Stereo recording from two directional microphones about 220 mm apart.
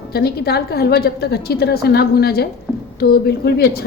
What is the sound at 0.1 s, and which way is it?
A woman's voice, 45° left (ahead or behind).